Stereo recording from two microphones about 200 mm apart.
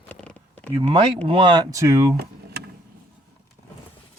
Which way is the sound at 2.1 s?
55° right (ahead or behind).